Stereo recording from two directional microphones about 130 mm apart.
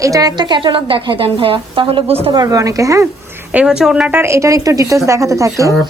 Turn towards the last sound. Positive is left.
turn(degrees=-25)  # may be behind; listen again after turning